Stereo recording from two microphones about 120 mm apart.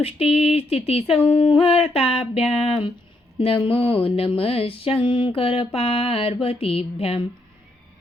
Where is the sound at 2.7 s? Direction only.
45° left (ahead or behind).